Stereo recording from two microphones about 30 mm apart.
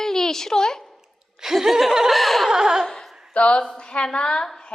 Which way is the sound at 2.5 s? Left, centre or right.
Centre.